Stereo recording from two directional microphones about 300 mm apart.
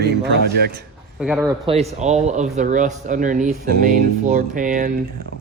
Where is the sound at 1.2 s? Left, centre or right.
Centre.